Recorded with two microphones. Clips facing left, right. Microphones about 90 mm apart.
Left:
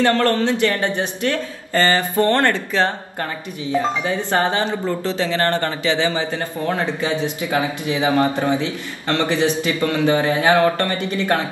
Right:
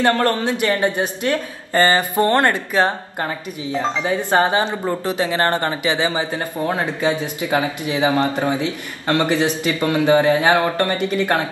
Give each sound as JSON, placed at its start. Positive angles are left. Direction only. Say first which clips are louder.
{"t": 0.0, "sound": "speech", "louder": "left 1 dB", "side_deg": -15}